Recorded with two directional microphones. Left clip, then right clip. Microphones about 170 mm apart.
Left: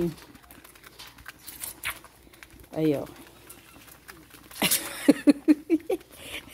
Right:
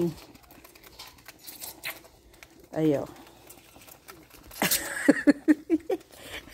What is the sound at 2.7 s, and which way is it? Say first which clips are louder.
Speech: even; 15° right (ahead or behind).